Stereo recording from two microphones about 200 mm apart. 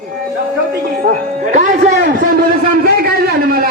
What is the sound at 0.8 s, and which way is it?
A man's voice, 50° right (ahead or behind).